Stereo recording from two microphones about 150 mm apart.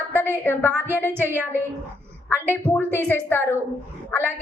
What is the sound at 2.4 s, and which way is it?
A woman's voice, 15° left (ahead or behind).